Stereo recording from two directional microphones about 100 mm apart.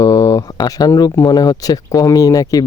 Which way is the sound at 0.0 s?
35° left (ahead or behind).